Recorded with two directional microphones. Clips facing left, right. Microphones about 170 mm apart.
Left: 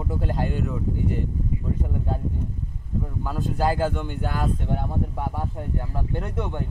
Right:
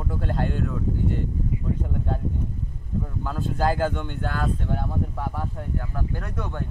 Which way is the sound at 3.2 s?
5° left (ahead or behind).